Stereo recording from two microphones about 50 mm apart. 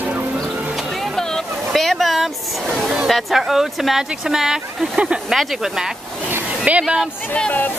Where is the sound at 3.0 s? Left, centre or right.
Centre.